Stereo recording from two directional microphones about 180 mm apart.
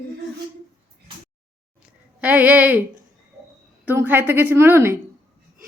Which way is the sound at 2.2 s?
10° right (ahead or behind).